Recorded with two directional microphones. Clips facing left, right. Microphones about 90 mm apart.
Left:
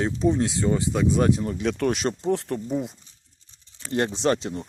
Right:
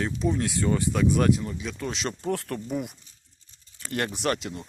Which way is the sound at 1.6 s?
65° left (ahead or behind).